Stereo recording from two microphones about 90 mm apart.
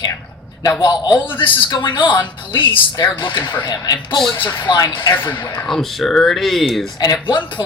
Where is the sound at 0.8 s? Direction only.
60° left (ahead or behind).